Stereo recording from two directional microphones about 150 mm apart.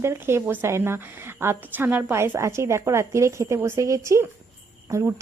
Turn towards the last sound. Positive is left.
turn(degrees=-20)  # may be behind; listen again after turning